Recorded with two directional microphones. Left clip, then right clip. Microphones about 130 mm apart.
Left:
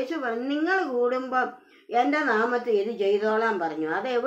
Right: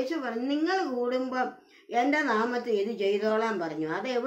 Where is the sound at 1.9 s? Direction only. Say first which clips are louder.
Left 3 dB; 20° right (ahead or behind).